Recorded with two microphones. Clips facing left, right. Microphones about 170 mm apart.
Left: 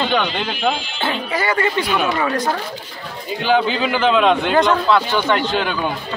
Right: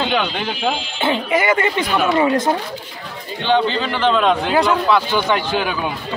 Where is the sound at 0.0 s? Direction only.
5° right (ahead or behind).